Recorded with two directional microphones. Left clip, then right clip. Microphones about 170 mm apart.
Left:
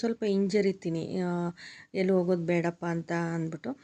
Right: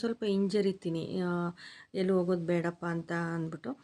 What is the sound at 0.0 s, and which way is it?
A woman's voice, 15° left (ahead or behind).